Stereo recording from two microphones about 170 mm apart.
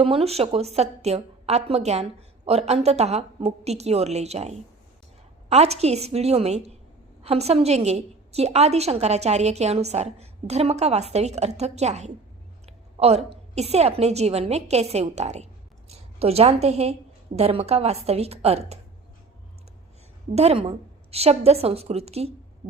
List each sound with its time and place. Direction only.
0.0 s a woman's voice: 35° right (ahead or behind)
20.3 s a woman's voice: 40° right (ahead or behind)